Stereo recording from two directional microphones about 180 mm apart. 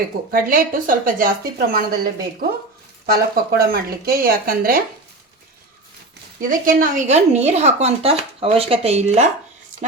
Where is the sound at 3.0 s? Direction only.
55° right (ahead or behind).